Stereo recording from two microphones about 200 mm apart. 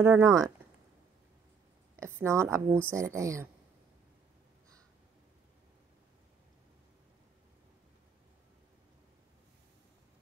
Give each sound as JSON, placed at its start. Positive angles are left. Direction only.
{"t": 0.0, "sound": "a woman's voice", "side_deg": -15}
{"t": 2.0, "sound": "a woman's voice", "side_deg": -15}